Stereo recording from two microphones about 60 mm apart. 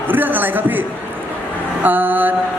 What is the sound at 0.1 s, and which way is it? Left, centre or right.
A man's voice, right.